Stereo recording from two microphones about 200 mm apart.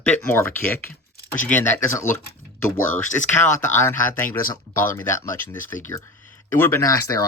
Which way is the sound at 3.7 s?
10° left (ahead or behind).